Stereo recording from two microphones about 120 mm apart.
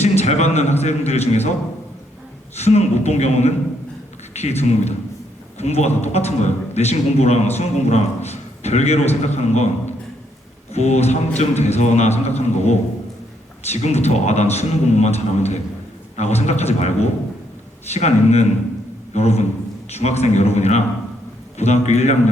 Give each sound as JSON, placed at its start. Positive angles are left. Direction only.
{"t": 0.0, "sound": "a man's voice", "side_deg": 65}
{"t": 2.6, "sound": "a man's voice", "side_deg": 65}
{"t": 10.7, "sound": "a man's voice", "side_deg": 65}